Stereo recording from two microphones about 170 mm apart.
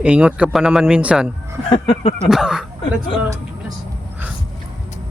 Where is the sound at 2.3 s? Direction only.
5° right (ahead or behind).